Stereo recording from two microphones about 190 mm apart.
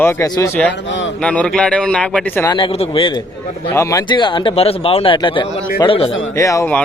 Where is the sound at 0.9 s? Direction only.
75° left (ahead or behind).